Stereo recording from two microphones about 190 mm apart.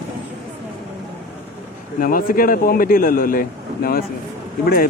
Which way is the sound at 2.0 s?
50° left (ahead or behind).